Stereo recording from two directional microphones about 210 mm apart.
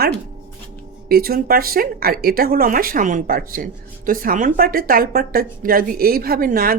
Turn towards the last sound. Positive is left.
turn(degrees=-45)  # may be behind; listen again after turning